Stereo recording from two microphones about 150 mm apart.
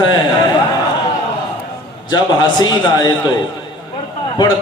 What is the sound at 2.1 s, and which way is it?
Speech, 30° left (ahead or behind).